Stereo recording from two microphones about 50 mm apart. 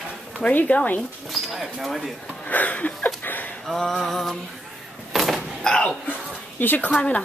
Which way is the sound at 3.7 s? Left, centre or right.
Centre.